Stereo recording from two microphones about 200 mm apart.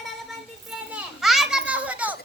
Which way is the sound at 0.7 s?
5° right (ahead or behind).